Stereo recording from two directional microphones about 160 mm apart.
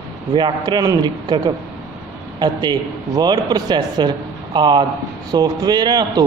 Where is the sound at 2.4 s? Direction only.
25° right (ahead or behind).